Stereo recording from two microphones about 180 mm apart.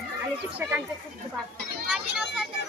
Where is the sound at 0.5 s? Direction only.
10° right (ahead or behind).